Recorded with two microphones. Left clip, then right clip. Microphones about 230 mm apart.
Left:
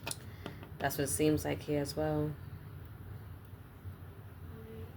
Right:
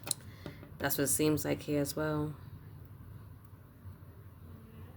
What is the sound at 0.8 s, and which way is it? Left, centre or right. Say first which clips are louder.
Speech: even; right.